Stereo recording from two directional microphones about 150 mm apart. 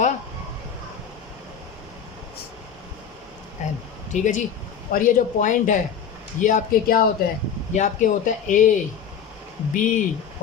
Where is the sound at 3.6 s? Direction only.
50° left (ahead or behind).